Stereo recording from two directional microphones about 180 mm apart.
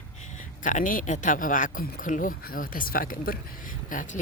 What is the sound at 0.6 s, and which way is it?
Speech, 45° left (ahead or behind).